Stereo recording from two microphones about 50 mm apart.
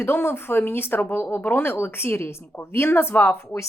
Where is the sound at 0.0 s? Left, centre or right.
Left.